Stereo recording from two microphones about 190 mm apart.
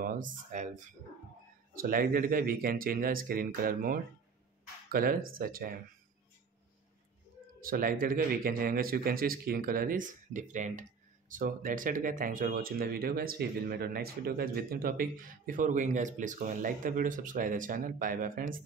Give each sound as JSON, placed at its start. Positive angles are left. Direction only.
{"t": 0.0, "sound": "speech", "side_deg": -45}
{"t": 7.6, "sound": "speech", "side_deg": -50}